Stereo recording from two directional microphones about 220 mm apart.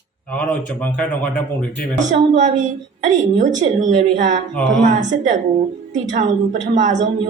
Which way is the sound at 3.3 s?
35° right (ahead or behind).